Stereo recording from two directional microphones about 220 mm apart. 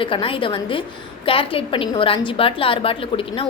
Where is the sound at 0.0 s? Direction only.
25° left (ahead or behind).